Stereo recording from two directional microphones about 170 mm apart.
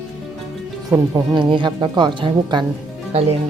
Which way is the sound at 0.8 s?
25° right (ahead or behind).